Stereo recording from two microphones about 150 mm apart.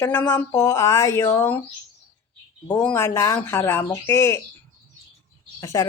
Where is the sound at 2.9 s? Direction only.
15° left (ahead or behind).